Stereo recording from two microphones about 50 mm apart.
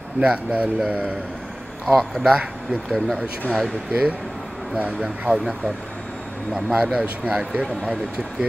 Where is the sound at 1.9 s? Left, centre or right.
Centre.